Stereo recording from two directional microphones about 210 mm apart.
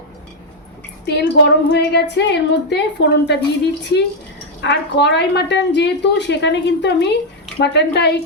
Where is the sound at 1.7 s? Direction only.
55° left (ahead or behind).